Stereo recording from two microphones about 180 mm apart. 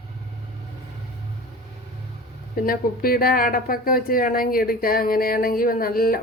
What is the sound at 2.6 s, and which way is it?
A woman's voice, 55° left (ahead or behind).